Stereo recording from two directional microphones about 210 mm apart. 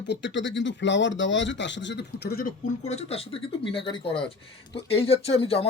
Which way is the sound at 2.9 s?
30° left (ahead or behind).